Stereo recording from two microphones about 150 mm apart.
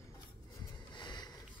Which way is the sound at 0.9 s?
30° left (ahead or behind).